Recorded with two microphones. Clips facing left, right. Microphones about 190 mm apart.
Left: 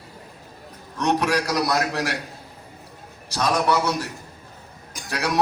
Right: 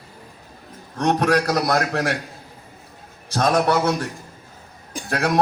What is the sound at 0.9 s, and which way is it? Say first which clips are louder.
A man's voice: right 3 dB; 50° right (ahead or behind).